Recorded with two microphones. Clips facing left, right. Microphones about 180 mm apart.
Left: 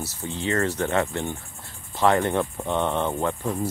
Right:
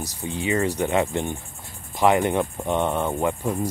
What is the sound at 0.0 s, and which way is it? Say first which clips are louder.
Speech: right 1 dB; 15° right (ahead or behind).